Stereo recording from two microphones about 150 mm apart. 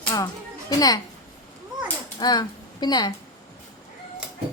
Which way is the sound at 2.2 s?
30° left (ahead or behind).